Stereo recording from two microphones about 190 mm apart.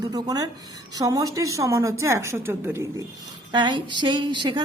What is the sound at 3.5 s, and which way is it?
A woman's voice, 25° right (ahead or behind).